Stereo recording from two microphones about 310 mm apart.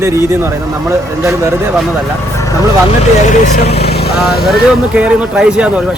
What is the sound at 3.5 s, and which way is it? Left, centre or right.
Speech, left.